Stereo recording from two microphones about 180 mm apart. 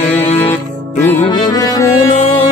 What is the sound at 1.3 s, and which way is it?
Music, 20° left (ahead or behind).